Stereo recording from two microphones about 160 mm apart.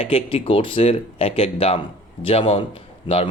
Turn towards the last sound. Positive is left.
turn(degrees=35)  # may be behind; listen again after turning